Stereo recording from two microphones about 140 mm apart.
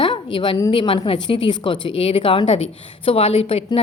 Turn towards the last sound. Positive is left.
turn(degrees=40)  # may be behind; listen again after turning